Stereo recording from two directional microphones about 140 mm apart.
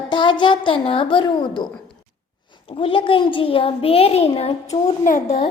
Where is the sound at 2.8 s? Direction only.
40° left (ahead or behind).